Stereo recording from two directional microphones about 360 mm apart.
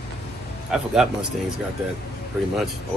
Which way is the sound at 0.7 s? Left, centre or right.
Centre.